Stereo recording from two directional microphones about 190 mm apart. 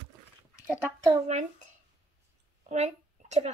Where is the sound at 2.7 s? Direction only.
35° right (ahead or behind).